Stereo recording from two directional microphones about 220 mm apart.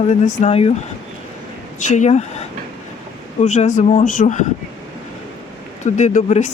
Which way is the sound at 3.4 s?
35° left (ahead or behind).